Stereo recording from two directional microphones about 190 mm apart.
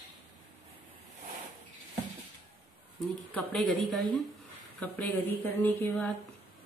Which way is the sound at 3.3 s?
Centre (ahead or behind).